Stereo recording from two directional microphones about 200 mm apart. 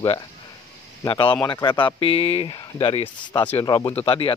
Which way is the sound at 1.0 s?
20° left (ahead or behind).